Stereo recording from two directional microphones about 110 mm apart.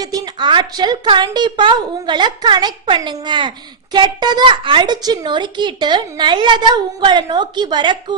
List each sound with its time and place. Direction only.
0.0 s a woman's voice: 35° right (ahead or behind)